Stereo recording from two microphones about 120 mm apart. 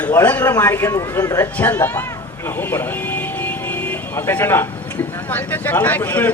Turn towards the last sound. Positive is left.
turn(degrees=15)  # may be behind; listen again after turning